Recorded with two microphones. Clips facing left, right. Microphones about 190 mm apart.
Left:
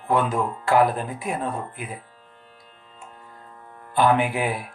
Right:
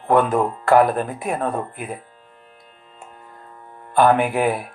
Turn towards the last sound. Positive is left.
turn(degrees=-55)  # may be behind; listen again after turning